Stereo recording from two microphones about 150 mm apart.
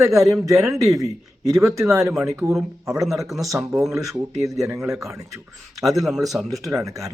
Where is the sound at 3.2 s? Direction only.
Centre (ahead or behind).